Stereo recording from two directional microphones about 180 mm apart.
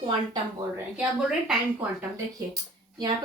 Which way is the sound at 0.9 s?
5° right (ahead or behind).